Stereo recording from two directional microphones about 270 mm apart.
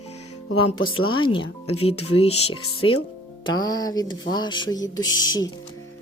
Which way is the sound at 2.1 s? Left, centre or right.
Left.